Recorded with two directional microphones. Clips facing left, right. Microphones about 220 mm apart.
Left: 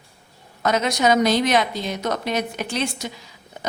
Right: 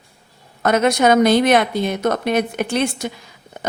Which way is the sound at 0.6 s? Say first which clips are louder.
Right 5 dB; 55° right (ahead or behind).